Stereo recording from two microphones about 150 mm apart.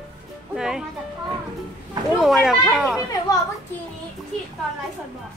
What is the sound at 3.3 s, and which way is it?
Speech, 25° left (ahead or behind).